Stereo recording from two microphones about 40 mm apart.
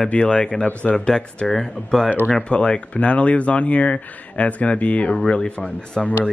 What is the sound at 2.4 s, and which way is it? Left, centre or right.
Speech, left.